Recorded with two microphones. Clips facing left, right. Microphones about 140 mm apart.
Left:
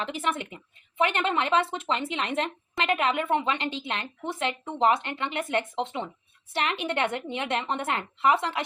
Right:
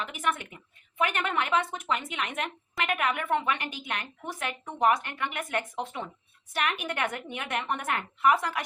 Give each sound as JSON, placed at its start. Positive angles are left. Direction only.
{"t": 0.0, "sound": "speech", "side_deg": 25}